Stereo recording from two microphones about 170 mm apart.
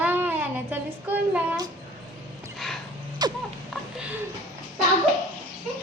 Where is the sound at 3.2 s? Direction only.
25° right (ahead or behind).